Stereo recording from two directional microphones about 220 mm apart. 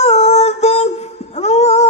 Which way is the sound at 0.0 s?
30° left (ahead or behind).